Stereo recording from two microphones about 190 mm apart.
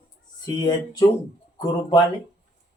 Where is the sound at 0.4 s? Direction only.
20° left (ahead or behind).